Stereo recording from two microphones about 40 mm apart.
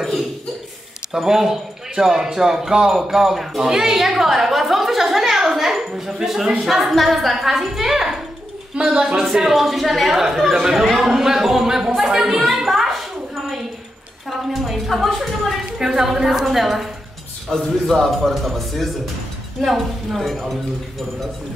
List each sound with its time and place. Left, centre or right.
1.1 s a woman's voice: centre
8.7 s a woman's voice: right; by 13.6 s centre
14.3 s a sound: centre
15.8 s a woman's voice: centre